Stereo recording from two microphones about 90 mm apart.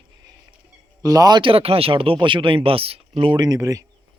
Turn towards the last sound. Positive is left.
turn(degrees=-40)  # may be behind; listen again after turning